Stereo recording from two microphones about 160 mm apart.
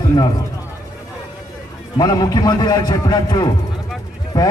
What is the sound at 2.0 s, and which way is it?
A man's voice, 25° left (ahead or behind).